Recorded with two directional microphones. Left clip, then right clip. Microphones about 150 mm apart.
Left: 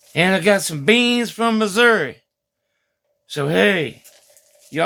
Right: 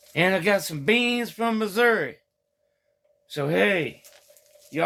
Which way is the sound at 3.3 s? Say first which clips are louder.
Left 5 dB; 50° left (ahead or behind).